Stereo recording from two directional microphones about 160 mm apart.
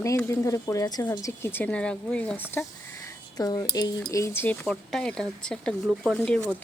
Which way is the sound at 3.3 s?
25° left (ahead or behind).